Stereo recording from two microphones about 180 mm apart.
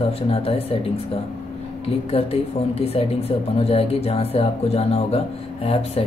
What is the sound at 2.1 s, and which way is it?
Speech, 35° left (ahead or behind).